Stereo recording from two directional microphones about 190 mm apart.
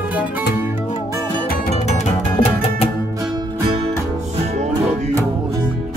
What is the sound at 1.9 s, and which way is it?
Music, 35° left (ahead or behind).